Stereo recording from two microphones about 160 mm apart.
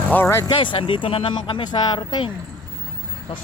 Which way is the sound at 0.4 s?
30° left (ahead or behind).